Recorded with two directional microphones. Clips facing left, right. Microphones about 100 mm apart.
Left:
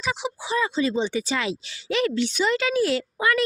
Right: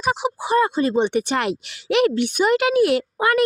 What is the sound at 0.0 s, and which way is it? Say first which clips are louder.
Speech: right 6 dB; 50° right (ahead or behind).